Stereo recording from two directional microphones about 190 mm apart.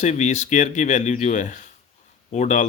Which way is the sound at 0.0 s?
35° left (ahead or behind).